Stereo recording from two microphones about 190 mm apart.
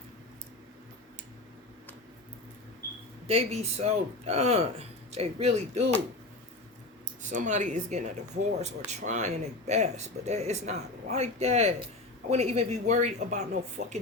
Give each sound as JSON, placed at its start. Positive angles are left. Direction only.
{"t": 3.2, "sound": "speech", "side_deg": -30}
{"t": 7.2, "sound": "speech", "side_deg": -40}